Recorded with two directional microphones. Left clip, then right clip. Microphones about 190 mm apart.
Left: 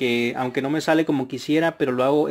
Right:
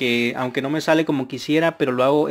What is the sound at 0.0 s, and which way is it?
A man's voice, 5° right (ahead or behind).